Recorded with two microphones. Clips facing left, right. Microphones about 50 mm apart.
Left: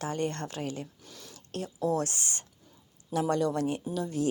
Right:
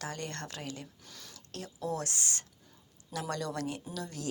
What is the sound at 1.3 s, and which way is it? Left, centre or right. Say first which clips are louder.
A woman's voice: left 8 dB; left.